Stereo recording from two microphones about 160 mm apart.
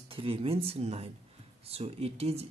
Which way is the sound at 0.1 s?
35° right (ahead or behind).